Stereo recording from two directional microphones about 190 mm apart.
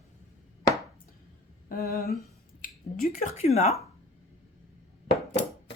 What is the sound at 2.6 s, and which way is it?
Speech, 45° left (ahead or behind).